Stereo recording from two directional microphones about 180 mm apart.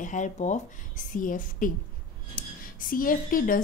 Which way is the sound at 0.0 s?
45° left (ahead or behind).